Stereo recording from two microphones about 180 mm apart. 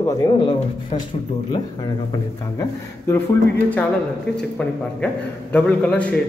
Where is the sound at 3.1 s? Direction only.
10° left (ahead or behind).